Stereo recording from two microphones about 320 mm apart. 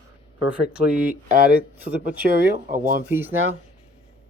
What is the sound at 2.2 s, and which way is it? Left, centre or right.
Speech, right.